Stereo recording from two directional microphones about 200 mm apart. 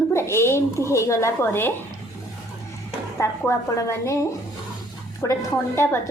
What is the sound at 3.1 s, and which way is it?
Speech, 15° left (ahead or behind).